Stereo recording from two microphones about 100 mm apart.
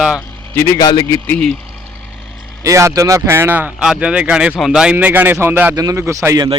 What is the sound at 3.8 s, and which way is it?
Speech, 10° right (ahead or behind).